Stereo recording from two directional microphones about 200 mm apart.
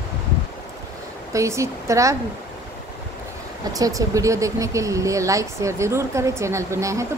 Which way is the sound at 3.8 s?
15° right (ahead or behind).